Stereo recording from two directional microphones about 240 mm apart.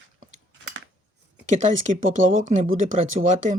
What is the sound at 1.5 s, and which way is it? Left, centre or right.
Speech, right.